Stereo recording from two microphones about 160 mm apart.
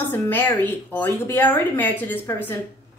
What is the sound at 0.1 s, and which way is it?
A woman's voice, 10° left (ahead or behind).